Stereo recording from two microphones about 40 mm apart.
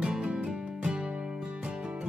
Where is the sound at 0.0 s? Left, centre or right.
Centre.